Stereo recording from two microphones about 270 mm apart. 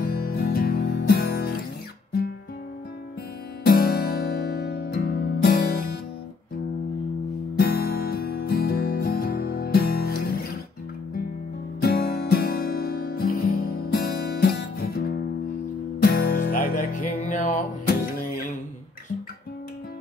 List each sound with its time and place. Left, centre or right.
0.0 s music: left
3.6 s music: left
7.5 s music: left
11.8 s music: left